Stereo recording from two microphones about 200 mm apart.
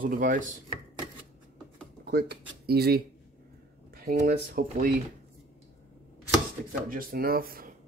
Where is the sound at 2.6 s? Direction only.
50° right (ahead or behind).